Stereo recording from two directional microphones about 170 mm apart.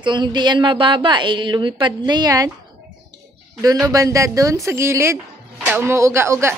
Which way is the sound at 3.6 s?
20° right (ahead or behind).